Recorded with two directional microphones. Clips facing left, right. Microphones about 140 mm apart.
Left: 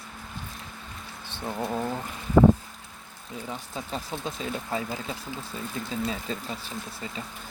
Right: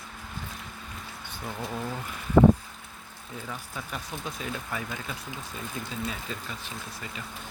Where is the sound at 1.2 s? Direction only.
30° left (ahead or behind).